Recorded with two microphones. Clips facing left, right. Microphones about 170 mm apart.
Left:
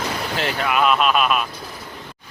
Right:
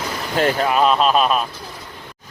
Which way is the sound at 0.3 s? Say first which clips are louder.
Right 9 dB; 45° right (ahead or behind).